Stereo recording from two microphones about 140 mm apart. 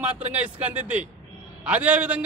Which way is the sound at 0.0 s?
10° right (ahead or behind).